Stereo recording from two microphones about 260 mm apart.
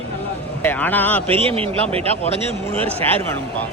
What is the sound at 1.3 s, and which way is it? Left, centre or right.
Speech, right.